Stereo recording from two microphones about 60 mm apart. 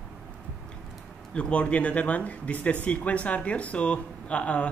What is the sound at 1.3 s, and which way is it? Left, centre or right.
Speech, centre.